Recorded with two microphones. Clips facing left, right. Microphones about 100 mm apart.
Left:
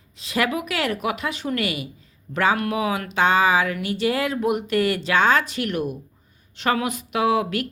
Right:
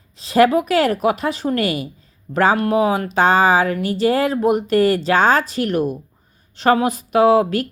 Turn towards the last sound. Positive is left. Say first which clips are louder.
# right 7 dB
turn(degrees=-35)  # may be behind; listen again after turning